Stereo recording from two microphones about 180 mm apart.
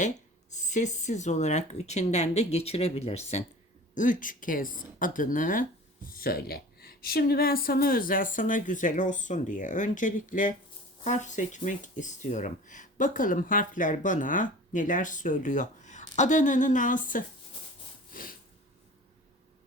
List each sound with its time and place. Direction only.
0.5 s speech: 40° left (ahead or behind)
3.9 s speech: 45° left (ahead or behind)
18.1 s a sound: 50° left (ahead or behind)